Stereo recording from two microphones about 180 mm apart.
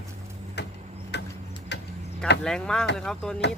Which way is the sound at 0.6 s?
70° left (ahead or behind).